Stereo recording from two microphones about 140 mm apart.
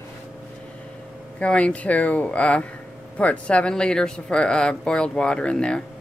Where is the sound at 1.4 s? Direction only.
10° left (ahead or behind).